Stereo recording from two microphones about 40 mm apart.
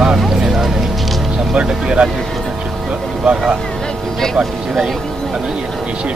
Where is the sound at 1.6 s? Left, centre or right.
Right.